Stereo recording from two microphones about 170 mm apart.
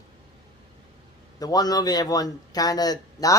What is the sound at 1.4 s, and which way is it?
Speech, 20° left (ahead or behind).